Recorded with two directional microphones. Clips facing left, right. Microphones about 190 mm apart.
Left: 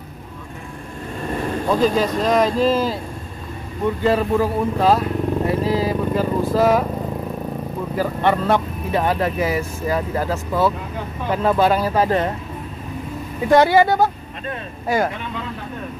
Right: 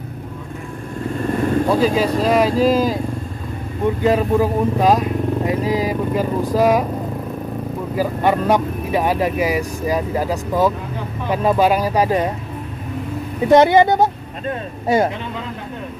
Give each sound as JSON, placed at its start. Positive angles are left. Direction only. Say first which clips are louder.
{"t": 1.7, "sound": "speech", "louder": "left 2 dB", "side_deg": -10}
{"t": 7.9, "sound": "speech", "louder": "right 1 dB", "side_deg": -10}
{"t": 13.5, "sound": "a woman's voice", "louder": "right 2 dB", "side_deg": -20}